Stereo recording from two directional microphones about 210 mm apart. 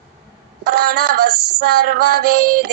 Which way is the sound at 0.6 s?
50° right (ahead or behind).